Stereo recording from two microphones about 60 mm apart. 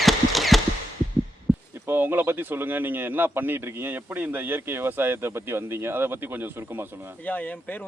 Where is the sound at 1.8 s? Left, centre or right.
Right.